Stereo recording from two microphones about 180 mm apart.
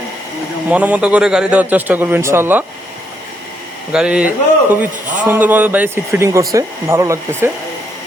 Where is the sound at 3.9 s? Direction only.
5° right (ahead or behind).